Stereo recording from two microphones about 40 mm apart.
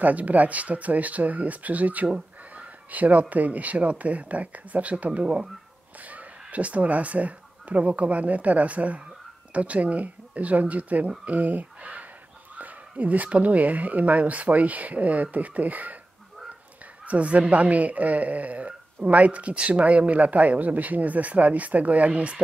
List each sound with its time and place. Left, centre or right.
0.0 s speech: right
5.2 s speech: right
5.9 s speech: right
17.0 s speech: right